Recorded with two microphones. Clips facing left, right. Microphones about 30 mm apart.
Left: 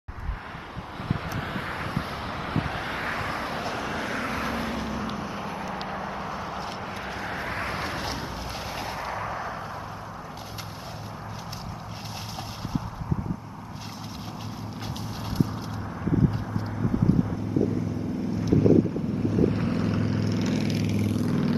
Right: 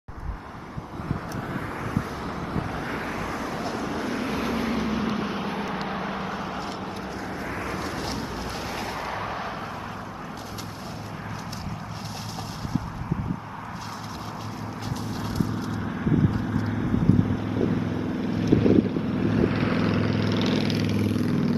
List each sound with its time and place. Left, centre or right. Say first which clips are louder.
2.0 s vehicle: right 1 dB; left
3.6 s vehicle: right 1 dB; centre
4.3 s vehicle: right 2 dB; centre
4.7 s vehicle: right 4 dB; right
6.1 s vehicle: right 2 dB; centre
7.2 s vehicle: left 2 dB; left
8.0 s a sound: right 1 dB; centre
8.7 s artillery fire: even; centre
9.1 s a sound: right 1 dB; right
15.0 s vehicle: left 1 dB; centre
17.4 s vehicle: right 1 dB; right